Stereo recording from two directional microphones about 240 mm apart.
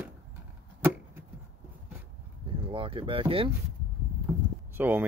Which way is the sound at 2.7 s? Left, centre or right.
Right.